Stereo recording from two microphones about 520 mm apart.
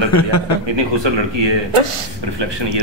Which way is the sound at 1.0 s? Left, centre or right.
Right.